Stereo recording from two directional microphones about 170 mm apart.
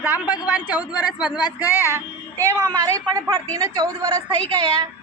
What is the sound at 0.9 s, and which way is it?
Speech, 25° left (ahead or behind).